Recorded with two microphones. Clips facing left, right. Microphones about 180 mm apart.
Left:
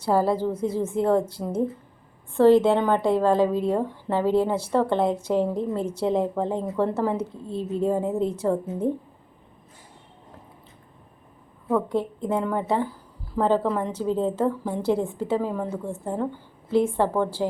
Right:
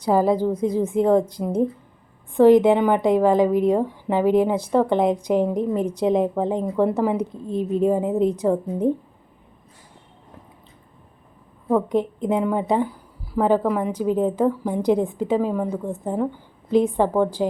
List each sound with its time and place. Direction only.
0.0 s a woman's voice: 15° right (ahead or behind)
11.7 s a woman's voice: 20° right (ahead or behind)